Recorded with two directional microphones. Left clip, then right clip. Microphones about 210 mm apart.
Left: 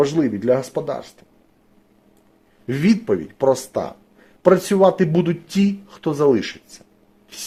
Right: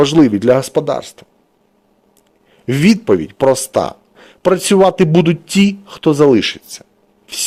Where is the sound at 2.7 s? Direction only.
30° right (ahead or behind).